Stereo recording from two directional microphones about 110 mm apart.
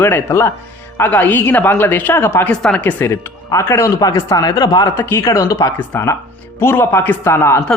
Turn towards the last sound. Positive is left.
turn(degrees=25)  # may be behind; listen again after turning